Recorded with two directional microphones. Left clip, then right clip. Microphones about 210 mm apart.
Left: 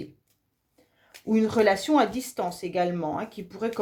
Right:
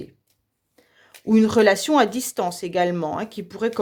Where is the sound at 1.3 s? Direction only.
45° right (ahead or behind).